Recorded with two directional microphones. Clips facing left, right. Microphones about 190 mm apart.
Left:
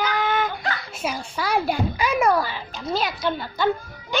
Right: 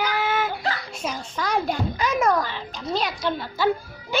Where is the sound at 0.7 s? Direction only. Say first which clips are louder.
Left 2 dB; 5° left (ahead or behind).